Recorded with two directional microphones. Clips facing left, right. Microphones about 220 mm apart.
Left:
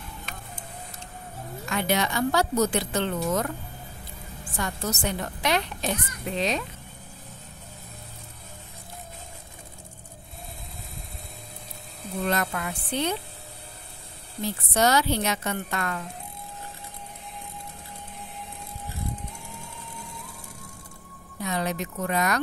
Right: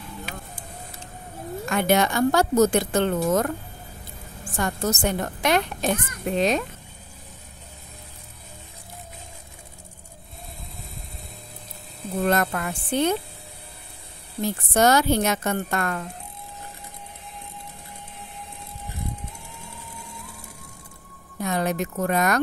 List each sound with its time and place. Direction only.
0.2 s vehicle: 10° right (ahead or behind)
1.7 s a child's voice: 50° right (ahead or behind)
12.2 s a child's voice: 50° right (ahead or behind)
14.4 s a child's voice: 50° right (ahead or behind)
21.4 s a child's voice: 50° right (ahead or behind)